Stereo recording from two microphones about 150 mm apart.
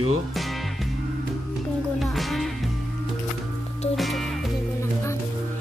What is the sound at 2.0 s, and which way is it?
Music, centre (ahead or behind).